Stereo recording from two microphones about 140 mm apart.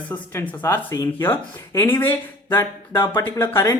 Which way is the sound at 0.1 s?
15° left (ahead or behind).